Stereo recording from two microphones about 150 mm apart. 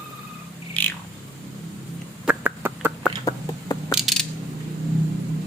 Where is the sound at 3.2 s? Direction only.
25° left (ahead or behind).